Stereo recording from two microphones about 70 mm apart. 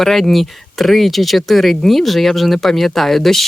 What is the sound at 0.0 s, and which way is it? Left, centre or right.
Speech, centre.